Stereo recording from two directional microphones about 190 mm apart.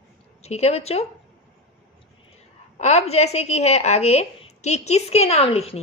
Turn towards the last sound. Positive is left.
turn(degrees=35)  # may be behind; listen again after turning